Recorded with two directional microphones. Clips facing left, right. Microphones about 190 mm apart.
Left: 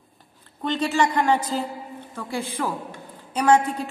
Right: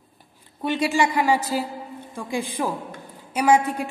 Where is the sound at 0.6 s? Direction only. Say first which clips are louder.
Right 1 dB; 10° right (ahead or behind).